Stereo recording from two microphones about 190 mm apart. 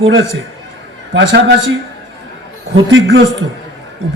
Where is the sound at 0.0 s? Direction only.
90° right.